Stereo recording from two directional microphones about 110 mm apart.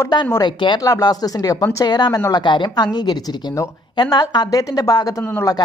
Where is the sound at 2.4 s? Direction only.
45° left (ahead or behind).